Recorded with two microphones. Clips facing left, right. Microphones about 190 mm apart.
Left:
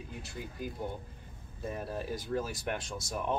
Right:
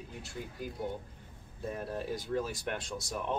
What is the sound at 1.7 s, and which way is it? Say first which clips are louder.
Speech: even; centre (ahead or behind).